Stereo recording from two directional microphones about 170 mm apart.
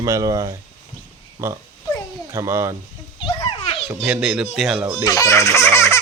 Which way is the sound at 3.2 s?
30° left (ahead or behind).